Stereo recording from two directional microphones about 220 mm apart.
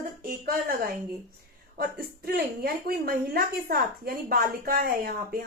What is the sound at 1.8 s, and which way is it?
A woman's voice, 45° right (ahead or behind).